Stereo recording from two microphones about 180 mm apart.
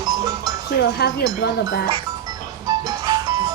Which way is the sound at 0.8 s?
65° left (ahead or behind).